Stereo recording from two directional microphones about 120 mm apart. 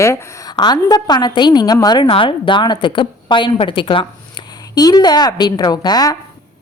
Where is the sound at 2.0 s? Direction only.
50° left (ahead or behind).